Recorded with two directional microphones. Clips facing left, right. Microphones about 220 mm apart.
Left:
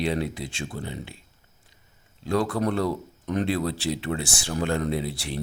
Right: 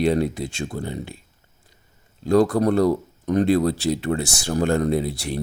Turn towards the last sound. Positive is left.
turn(degrees=-45)  # may be behind; listen again after turning